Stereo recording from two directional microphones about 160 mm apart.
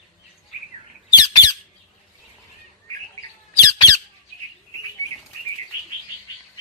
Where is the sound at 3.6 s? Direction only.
20° left (ahead or behind).